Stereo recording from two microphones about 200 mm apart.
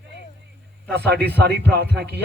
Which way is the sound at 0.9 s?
55° right (ahead or behind).